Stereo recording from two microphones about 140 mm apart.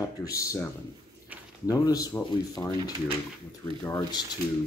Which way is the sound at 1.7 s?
25° left (ahead or behind).